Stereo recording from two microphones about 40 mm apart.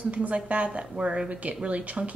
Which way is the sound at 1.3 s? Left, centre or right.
Right.